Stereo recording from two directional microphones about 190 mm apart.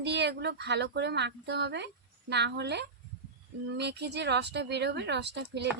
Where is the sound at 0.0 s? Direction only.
60° right (ahead or behind).